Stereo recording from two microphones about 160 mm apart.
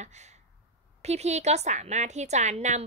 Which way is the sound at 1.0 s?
45° right (ahead or behind).